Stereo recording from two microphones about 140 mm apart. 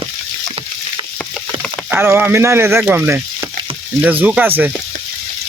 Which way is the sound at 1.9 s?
15° right (ahead or behind).